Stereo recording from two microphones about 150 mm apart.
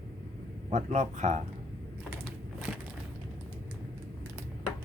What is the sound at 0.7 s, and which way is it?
Speech, 55° right (ahead or behind).